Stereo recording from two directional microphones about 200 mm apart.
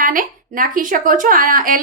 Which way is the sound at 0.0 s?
45° right (ahead or behind).